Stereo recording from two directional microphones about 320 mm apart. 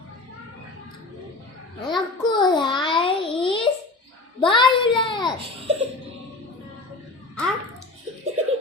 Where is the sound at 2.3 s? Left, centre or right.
Centre.